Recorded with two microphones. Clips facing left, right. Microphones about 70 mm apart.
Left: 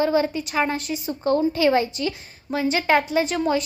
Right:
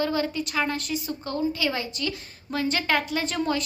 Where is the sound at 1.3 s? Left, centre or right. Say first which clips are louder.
Left 8 dB; left.